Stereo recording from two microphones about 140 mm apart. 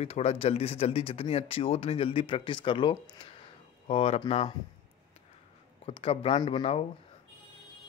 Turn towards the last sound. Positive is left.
turn(degrees=45)  # may be behind; listen again after turning